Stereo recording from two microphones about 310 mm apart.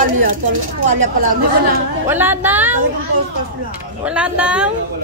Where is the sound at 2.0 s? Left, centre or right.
Centre.